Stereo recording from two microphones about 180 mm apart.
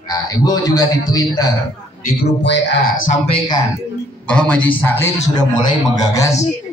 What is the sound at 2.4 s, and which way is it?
Speech, 80° left.